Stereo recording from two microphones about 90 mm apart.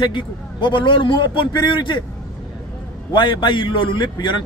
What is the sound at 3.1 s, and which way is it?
A man's voice, 65° left (ahead or behind).